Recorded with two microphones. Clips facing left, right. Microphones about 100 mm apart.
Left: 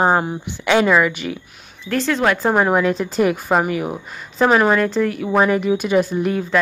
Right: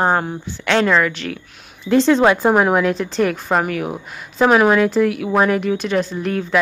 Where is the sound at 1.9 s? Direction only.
25° right (ahead or behind).